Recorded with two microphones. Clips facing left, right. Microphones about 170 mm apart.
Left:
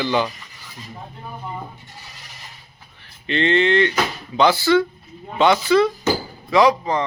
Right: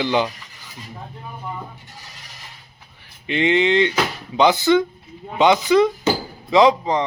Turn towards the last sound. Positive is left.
turn(degrees=-20)  # may be behind; listen again after turning